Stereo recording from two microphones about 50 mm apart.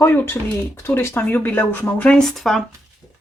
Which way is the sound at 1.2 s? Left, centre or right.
Left.